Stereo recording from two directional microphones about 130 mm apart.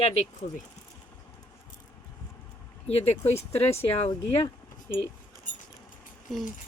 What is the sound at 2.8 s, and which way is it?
Speech, 50° left (ahead or behind).